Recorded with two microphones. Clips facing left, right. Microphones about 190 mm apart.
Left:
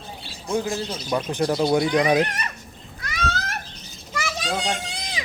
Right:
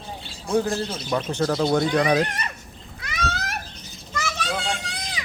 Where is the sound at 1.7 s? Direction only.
10° left (ahead or behind).